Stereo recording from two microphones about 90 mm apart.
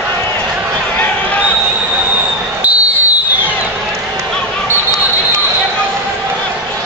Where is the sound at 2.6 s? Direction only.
15° right (ahead or behind).